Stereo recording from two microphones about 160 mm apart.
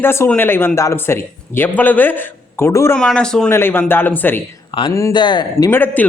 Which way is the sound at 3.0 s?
5° left (ahead or behind).